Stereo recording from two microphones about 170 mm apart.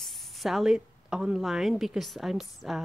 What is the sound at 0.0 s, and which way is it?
A woman's voice, centre (ahead or behind).